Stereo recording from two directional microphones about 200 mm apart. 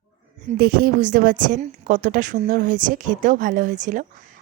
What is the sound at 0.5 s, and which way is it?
A woman's voice, 45° right (ahead or behind).